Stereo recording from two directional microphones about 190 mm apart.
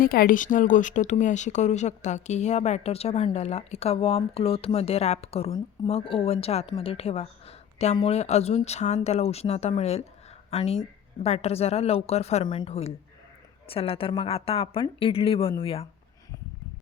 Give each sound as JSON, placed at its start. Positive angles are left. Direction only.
{"t": 0.0, "sound": "speech", "side_deg": 50}